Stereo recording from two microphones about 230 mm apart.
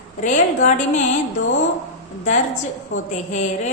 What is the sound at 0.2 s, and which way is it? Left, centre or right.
Speech, left.